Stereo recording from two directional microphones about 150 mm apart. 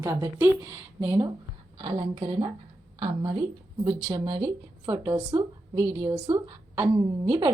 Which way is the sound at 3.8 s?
25° right (ahead or behind).